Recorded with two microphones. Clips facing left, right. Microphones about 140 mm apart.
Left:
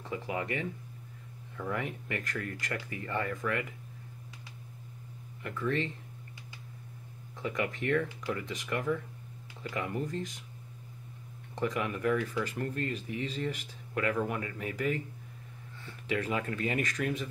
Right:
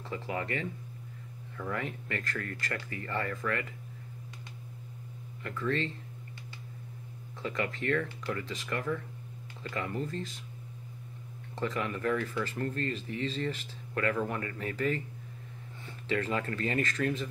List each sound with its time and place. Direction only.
0.1 s speech: 15° left (ahead or behind)
5.4 s speech: 15° left (ahead or behind)
7.4 s speech: 15° left (ahead or behind)
11.5 s speech: 15° left (ahead or behind)
16.1 s speech: 10° left (ahead or behind)